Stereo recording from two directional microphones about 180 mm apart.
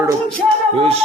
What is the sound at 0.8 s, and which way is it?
Speech, 35° right (ahead or behind).